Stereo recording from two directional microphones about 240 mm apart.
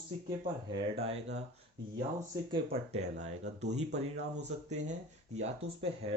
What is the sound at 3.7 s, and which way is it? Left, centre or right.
Speech, right.